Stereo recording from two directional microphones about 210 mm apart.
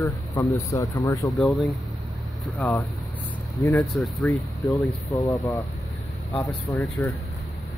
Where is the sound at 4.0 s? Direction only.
Centre (ahead or behind).